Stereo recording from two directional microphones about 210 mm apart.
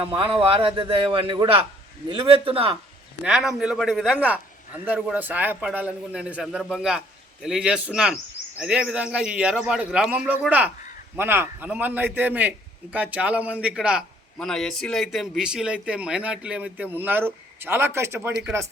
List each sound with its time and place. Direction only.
0.3 s a man's voice: 25° right (ahead or behind)
3.2 s a man's voice: centre (ahead or behind)